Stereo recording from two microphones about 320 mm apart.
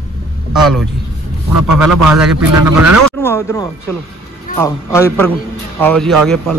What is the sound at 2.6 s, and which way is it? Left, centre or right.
Speech, right.